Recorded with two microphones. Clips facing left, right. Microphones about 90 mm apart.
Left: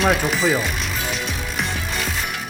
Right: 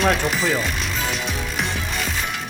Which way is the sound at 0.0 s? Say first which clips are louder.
Left 1 dB; centre (ahead or behind).